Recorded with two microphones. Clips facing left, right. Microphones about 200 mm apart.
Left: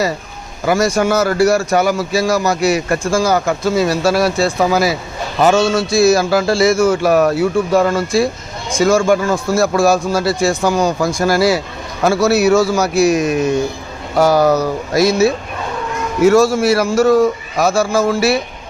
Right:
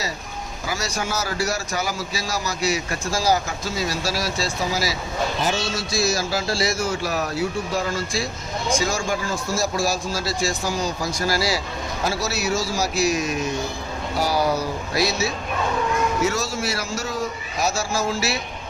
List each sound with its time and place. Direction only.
0.6 s a man's voice: 55° left (ahead or behind)
14.2 s a man's voice: 50° left (ahead or behind)